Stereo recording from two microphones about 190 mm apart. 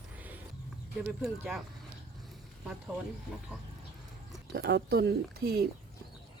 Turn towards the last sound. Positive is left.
turn(degrees=-55)  # may be behind; listen again after turning